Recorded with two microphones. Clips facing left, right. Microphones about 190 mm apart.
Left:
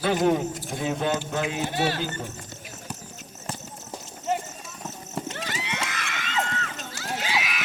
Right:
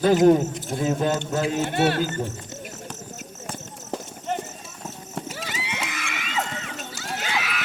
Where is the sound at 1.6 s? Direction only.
60° right (ahead or behind).